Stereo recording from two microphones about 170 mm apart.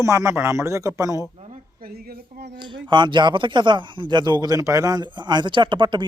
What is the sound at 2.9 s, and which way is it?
A man's voice, 25° right (ahead or behind).